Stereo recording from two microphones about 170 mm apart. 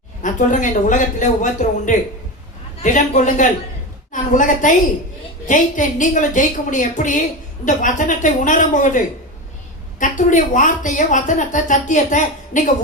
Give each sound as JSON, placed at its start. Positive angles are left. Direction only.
{"t": 0.2, "sound": "a woman's voice", "side_deg": 50}